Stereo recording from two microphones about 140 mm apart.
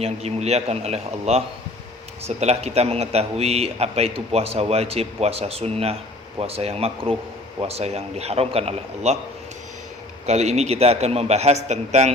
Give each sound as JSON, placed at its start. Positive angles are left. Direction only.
{"t": 0.0, "sound": "a man's voice", "side_deg": -50}
{"t": 10.2, "sound": "a man's voice", "side_deg": -55}